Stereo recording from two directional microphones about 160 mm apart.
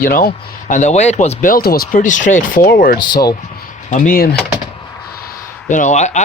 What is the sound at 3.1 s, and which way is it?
Speech, 25° left (ahead or behind).